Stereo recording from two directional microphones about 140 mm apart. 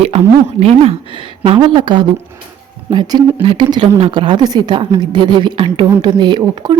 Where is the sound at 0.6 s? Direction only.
45° right (ahead or behind).